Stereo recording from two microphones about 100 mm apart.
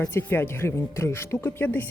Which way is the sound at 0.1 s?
25° left (ahead or behind).